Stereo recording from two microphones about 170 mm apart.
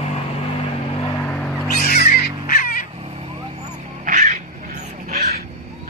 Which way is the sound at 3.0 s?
35° right (ahead or behind).